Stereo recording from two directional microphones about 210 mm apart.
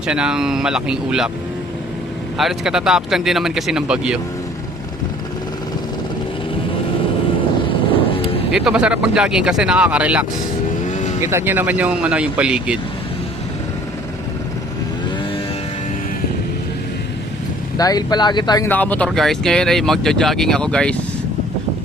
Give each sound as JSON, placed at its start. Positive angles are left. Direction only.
{"t": 0.1, "sound": "speech", "side_deg": -5}
{"t": 2.4, "sound": "speech", "side_deg": 0}
{"t": 8.5, "sound": "speech", "side_deg": -5}
{"t": 10.8, "sound": "vehicle", "side_deg": 35}
{"t": 11.2, "sound": "speech", "side_deg": -10}
{"t": 17.7, "sound": "speech", "side_deg": 20}